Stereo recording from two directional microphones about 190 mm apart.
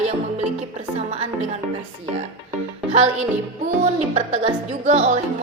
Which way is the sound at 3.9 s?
35° right (ahead or behind).